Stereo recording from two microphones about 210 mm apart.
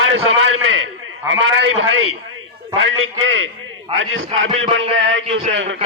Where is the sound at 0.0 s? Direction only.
75° right (ahead or behind).